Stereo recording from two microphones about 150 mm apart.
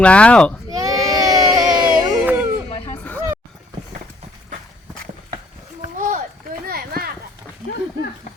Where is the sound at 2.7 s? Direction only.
35° left (ahead or behind).